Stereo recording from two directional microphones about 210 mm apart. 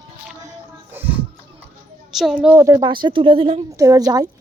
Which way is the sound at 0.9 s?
10° right (ahead or behind).